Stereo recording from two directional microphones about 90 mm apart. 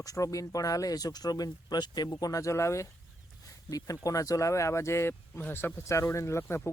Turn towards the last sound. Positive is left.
turn(degrees=30)  # may be behind; listen again after turning